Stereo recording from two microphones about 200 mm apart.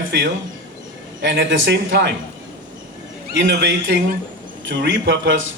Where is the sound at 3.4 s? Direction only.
60° right (ahead or behind).